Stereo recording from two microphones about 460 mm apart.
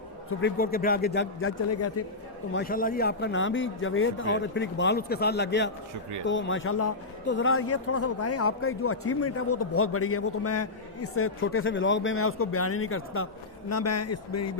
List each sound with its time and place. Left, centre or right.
0.3 s speech: left
2.5 s speech: centre